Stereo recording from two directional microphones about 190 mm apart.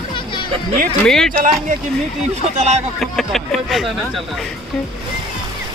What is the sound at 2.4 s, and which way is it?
Speech, 35° right (ahead or behind).